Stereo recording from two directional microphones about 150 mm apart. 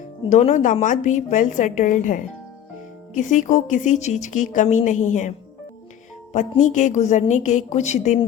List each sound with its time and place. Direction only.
0.3 s speech: 55° left (ahead or behind)
6.3 s a woman's voice: 55° left (ahead or behind)